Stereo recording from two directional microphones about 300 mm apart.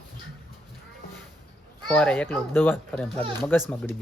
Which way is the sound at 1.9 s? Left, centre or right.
Centre.